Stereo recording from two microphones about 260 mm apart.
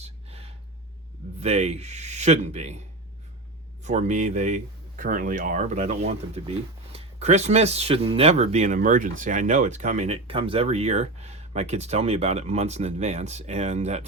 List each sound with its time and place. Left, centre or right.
0.0 s a sound: right
1.4 s speech: right
3.8 s speech: right